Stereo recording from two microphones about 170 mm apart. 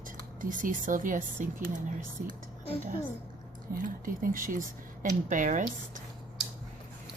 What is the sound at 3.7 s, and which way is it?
A woman's voice, 55° right (ahead or behind).